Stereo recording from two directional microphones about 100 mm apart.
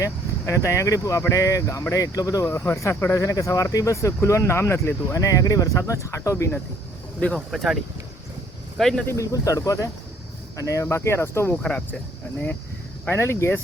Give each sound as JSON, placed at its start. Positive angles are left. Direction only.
{"t": 0.0, "sound": "speech", "side_deg": 30}
{"t": 7.3, "sound": "speech", "side_deg": 0}
{"t": 8.8, "sound": "speech", "side_deg": 5}
{"t": 9.0, "sound": "speech", "side_deg": 35}
{"t": 11.5, "sound": "speech", "side_deg": 10}
{"t": 13.1, "sound": "speech", "side_deg": 25}